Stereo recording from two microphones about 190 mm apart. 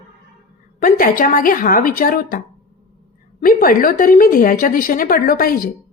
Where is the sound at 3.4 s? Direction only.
50° left (ahead or behind).